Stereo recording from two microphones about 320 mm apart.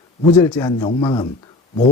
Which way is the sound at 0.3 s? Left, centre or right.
Centre.